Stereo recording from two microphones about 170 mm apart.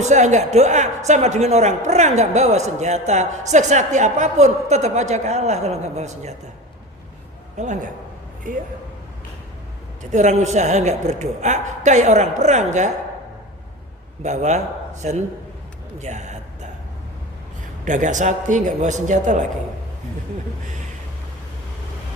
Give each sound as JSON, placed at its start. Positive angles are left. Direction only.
{"t": 0.0, "sound": "a man's voice", "side_deg": -45}
{"t": 7.5, "sound": "a man's voice", "side_deg": -45}
{"t": 10.0, "sound": "a man's voice", "side_deg": -45}
{"t": 14.2, "sound": "a man's voice", "side_deg": -40}
{"t": 16.0, "sound": "speech", "side_deg": -45}
{"t": 17.8, "sound": "a man's voice", "side_deg": -50}